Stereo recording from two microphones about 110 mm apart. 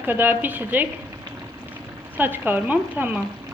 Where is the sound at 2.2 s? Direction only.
15° right (ahead or behind).